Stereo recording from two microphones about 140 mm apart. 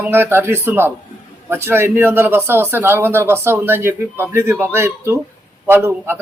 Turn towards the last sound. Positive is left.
turn(degrees=-15)  # may be behind; listen again after turning